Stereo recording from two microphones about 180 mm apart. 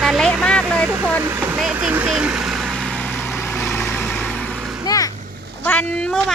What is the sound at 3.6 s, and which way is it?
Vehicle, 15° left (ahead or behind).